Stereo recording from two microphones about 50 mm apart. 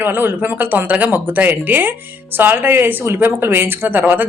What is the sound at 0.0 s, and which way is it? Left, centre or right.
Speech, right.